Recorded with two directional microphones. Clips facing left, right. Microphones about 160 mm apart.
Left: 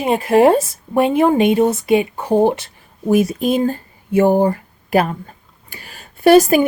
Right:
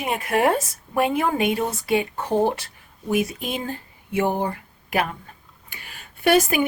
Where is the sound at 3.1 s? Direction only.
40° left (ahead or behind).